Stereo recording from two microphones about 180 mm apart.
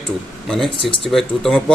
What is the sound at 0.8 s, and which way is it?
Speech, 30° left (ahead or behind).